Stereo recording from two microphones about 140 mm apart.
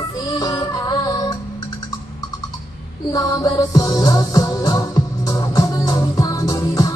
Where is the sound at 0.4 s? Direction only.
25° left (ahead or behind).